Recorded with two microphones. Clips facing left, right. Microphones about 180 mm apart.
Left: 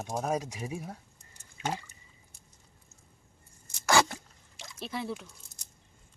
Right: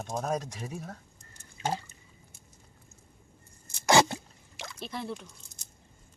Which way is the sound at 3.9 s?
25° right (ahead or behind).